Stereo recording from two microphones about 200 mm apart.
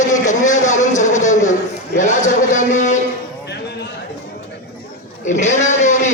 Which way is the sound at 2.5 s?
40° left (ahead or behind).